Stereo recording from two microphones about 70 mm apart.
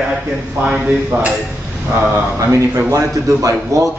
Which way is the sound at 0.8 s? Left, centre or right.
Right.